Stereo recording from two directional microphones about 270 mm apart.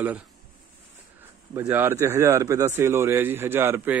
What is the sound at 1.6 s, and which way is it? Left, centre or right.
Speech, centre.